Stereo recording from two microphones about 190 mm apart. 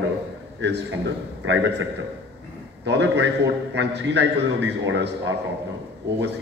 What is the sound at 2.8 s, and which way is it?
A man's voice, 65° right (ahead or behind).